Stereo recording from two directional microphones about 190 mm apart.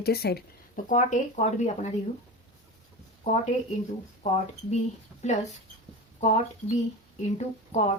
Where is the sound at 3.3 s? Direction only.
40° left (ahead or behind).